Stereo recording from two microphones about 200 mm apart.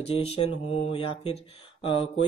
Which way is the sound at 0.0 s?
30° left (ahead or behind).